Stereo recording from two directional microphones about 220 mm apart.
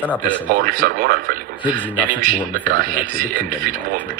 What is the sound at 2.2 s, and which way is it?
Speech, 40° right (ahead or behind).